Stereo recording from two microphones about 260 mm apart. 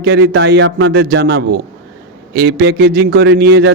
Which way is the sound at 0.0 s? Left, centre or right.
Right.